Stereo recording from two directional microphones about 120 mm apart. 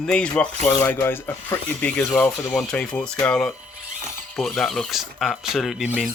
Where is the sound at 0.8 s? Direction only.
20° left (ahead or behind).